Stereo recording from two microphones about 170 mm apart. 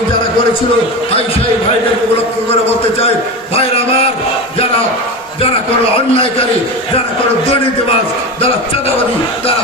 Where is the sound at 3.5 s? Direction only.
35° left (ahead or behind).